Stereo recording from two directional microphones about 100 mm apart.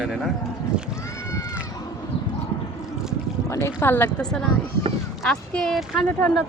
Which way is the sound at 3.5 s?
25° left (ahead or behind).